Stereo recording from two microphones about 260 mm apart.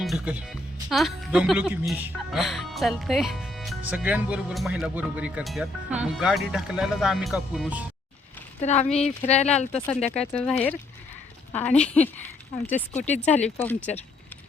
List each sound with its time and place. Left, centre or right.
0.0 s speech: centre
8.6 s speech: left
9.7 s speech: centre
12.9 s speech: left
13.2 s speech: centre